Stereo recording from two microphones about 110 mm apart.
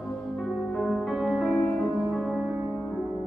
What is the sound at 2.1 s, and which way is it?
Music, 5° right (ahead or behind).